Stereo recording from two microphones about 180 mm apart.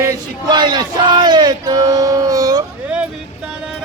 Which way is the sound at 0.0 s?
20° right (ahead or behind).